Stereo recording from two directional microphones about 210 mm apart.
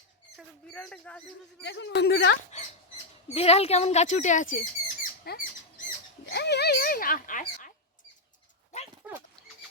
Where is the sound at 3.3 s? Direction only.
30° left (ahead or behind).